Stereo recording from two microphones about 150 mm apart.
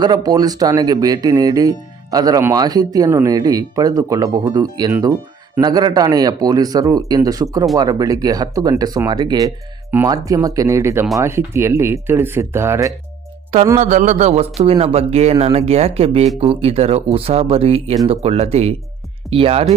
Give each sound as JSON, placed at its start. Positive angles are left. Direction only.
{"t": 0.0, "sound": "speech", "side_deg": -25}
{"t": 13.7, "sound": "speech", "side_deg": -50}